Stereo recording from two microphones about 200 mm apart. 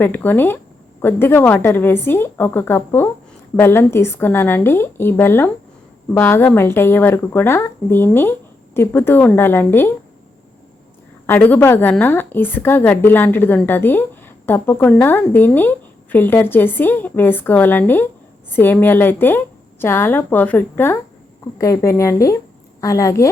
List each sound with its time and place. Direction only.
0.0 s speech: 10° left (ahead or behind)
11.3 s speech: 10° left (ahead or behind)